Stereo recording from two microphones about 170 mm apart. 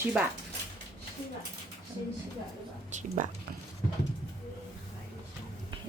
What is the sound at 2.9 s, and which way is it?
Whispering, 45° right (ahead or behind).